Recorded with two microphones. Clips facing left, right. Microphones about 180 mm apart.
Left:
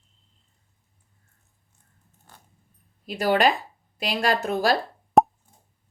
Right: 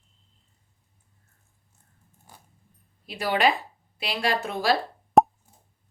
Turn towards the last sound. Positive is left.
turn(degrees=0)  # may be behind; listen again after turning